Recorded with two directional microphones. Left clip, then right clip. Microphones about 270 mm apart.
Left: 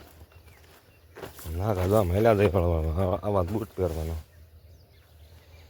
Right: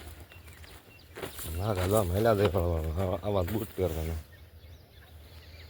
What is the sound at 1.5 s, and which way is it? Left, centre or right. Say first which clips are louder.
Speech: left 4 dB; left.